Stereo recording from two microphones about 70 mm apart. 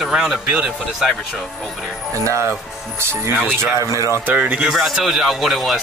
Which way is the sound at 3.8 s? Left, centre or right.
Right.